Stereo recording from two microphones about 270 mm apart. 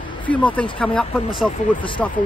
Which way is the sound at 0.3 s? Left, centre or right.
Centre.